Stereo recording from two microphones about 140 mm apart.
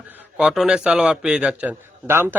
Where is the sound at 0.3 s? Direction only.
5° right (ahead or behind).